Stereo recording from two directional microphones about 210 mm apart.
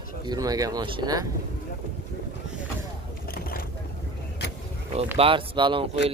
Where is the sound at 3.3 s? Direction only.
45° left (ahead or behind).